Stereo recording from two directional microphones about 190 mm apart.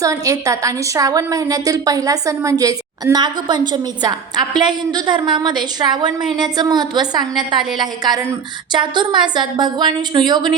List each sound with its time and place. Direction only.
0.0 s a woman's voice: 20° right (ahead or behind)